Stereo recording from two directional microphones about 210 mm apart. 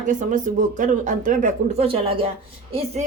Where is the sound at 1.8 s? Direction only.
25° right (ahead or behind).